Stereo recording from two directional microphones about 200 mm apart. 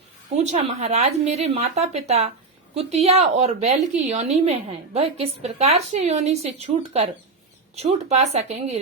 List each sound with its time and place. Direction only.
0.3 s a woman's voice: 35° right (ahead or behind)